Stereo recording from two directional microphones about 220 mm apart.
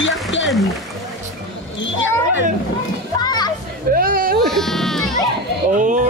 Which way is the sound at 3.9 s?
40° right (ahead or behind).